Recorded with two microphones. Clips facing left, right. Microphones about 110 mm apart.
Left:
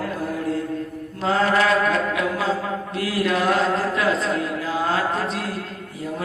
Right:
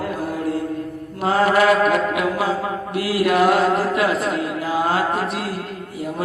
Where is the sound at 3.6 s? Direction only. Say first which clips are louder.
Right 3 dB; 15° right (ahead or behind).